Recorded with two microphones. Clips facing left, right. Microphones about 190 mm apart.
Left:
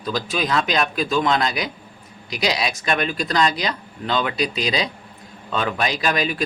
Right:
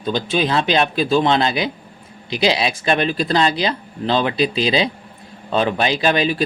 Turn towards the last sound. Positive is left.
turn(degrees=-30)  # may be behind; listen again after turning